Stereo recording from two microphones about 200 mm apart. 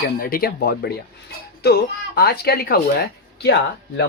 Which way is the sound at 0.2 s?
45° left (ahead or behind).